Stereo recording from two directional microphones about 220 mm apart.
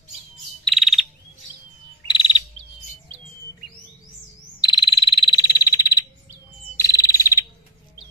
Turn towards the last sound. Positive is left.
turn(degrees=15)  # may be behind; listen again after turning